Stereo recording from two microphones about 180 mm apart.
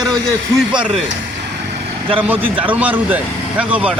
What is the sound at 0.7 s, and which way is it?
Speech, 25° right (ahead or behind).